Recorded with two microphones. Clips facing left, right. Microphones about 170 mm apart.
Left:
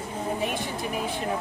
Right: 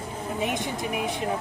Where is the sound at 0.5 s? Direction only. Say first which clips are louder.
Right 1 dB; 20° right (ahead or behind).